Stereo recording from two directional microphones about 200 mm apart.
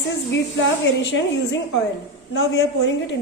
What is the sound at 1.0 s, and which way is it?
A woman's voice, 60° left (ahead or behind).